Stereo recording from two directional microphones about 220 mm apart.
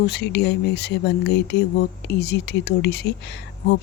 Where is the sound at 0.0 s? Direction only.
50° left (ahead or behind).